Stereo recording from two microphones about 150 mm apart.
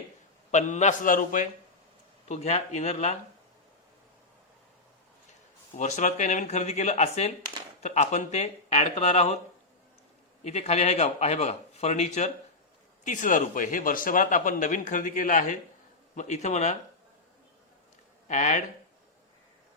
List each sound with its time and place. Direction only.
0.5 s speech: 55° left (ahead or behind)
2.2 s speech: 50° left (ahead or behind)
5.7 s speech: 55° left (ahead or behind)
10.4 s speech: 45° left (ahead or behind)
18.3 s speech: 55° left (ahead or behind)